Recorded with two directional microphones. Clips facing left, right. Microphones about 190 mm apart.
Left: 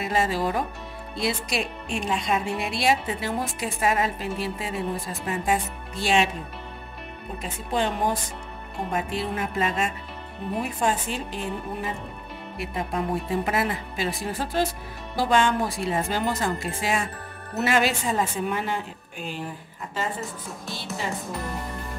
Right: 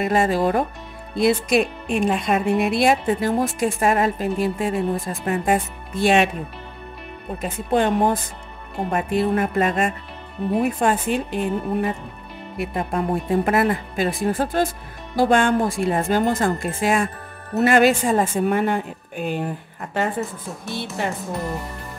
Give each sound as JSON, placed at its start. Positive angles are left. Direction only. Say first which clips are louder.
{"t": 0.0, "sound": "speech", "louder": "right 6 dB", "side_deg": -55}
{"t": 7.4, "sound": "speech", "louder": "right 7 dB", "side_deg": -55}